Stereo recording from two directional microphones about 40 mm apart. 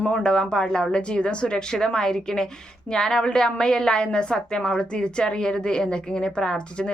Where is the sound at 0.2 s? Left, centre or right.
Left.